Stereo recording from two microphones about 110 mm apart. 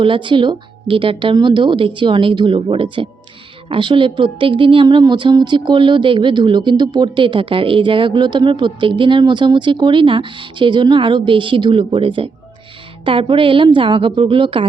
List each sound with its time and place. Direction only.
0.0 s speech: 50° right (ahead or behind)